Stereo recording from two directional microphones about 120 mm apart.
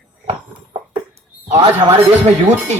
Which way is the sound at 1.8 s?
40° right (ahead or behind).